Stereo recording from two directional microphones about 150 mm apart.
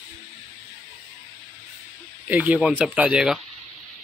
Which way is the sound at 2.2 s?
10° right (ahead or behind).